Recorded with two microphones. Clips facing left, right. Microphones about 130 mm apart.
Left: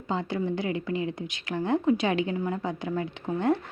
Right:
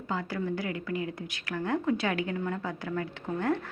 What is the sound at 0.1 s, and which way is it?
A woman's voice, 25° left (ahead or behind).